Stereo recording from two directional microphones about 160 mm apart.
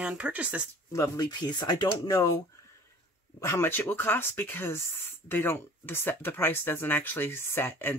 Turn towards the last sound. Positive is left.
turn(degrees=15)  # may be behind; listen again after turning